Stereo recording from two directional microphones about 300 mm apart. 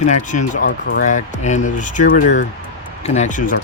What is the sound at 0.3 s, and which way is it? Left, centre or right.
Speech, left.